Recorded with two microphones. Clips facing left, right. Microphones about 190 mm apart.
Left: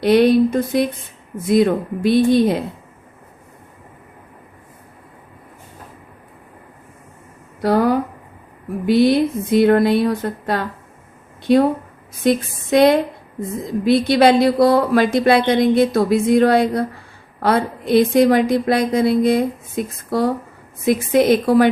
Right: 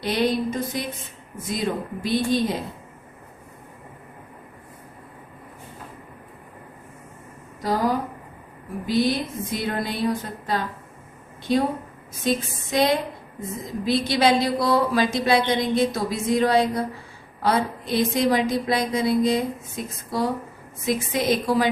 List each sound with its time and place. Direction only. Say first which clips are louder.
0.0 s a woman's voice: left 10 dB; 60° left (ahead or behind)
7.6 s a woman's voice: left 7 dB; 60° left (ahead or behind)